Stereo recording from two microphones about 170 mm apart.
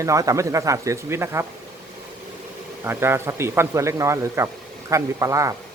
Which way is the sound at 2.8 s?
15° right (ahead or behind).